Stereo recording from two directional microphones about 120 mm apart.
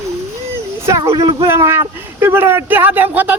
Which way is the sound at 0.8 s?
25° right (ahead or behind).